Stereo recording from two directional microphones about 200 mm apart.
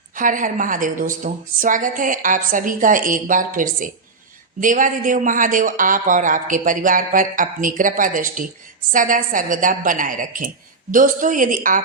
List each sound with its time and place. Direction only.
0.2 s a man's voice: 40° right (ahead or behind)